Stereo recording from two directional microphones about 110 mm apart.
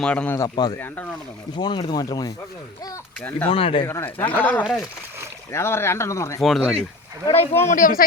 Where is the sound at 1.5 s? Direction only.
45° left (ahead or behind).